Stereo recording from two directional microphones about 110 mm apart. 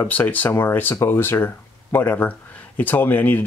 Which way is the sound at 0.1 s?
15° left (ahead or behind).